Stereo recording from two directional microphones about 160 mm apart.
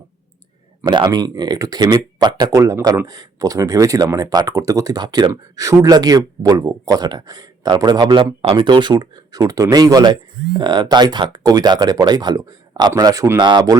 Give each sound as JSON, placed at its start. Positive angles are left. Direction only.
{"t": 0.9, "sound": "speech", "side_deg": -25}